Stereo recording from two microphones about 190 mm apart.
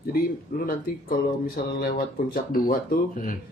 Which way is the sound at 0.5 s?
50° left (ahead or behind).